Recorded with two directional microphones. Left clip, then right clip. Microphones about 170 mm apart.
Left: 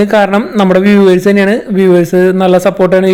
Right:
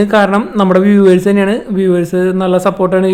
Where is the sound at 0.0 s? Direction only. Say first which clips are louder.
Left 2 dB; 20° left (ahead or behind).